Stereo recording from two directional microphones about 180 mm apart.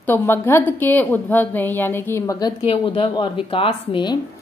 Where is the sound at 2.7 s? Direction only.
30° left (ahead or behind).